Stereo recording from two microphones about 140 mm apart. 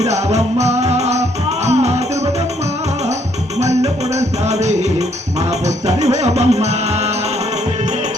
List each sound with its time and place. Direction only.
0.0 s music: 50° right (ahead or behind)
3.6 s music: 55° right (ahead or behind)